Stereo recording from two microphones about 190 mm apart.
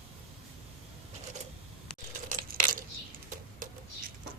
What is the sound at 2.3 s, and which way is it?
Coin, 45° right (ahead or behind).